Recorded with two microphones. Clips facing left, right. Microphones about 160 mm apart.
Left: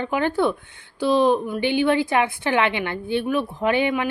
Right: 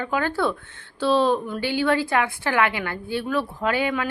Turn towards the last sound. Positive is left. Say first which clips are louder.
# left 3 dB
turn(degrees=20)  # may be behind; listen again after turning